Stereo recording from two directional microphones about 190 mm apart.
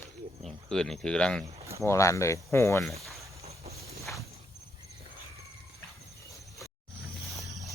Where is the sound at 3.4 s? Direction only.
35° right (ahead or behind).